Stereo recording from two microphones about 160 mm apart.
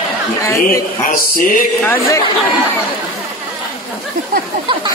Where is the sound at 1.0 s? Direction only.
60° left (ahead or behind).